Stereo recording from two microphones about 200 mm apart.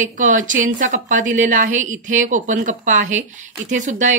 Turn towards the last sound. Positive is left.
turn(degrees=-40)  # may be behind; listen again after turning